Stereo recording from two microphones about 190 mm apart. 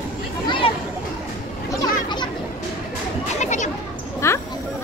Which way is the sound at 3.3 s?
40° left (ahead or behind).